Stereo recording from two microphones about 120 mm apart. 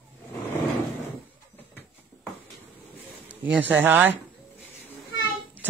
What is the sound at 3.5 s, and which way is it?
Speech, 15° right (ahead or behind).